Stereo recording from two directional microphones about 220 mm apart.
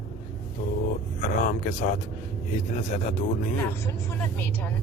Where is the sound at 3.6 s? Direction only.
10° left (ahead or behind).